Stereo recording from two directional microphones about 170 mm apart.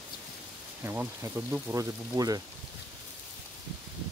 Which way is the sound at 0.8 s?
15° right (ahead or behind).